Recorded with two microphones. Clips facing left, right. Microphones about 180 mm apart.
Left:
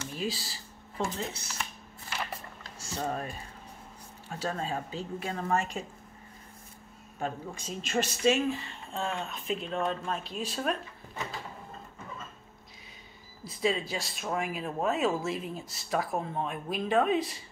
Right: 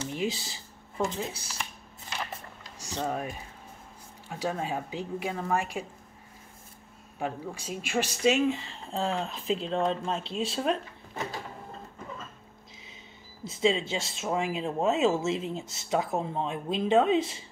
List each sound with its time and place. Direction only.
0.0 s a sound: 20° right (ahead or behind)
3.1 s speech: 10° right (ahead or behind)
7.2 s speech: 10° right (ahead or behind)
13.4 s speech: 25° right (ahead or behind)